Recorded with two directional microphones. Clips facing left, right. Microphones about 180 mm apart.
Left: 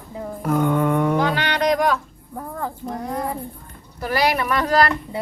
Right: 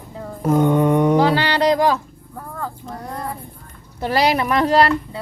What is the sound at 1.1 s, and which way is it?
Speech, 30° right (ahead or behind).